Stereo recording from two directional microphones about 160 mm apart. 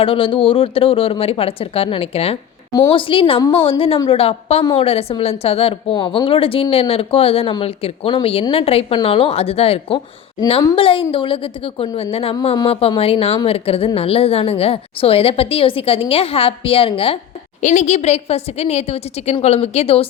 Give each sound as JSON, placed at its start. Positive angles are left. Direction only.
{"t": 0.0, "sound": "a woman's voice", "side_deg": 35}
{"t": 17.6, "sound": "a woman's voice", "side_deg": 50}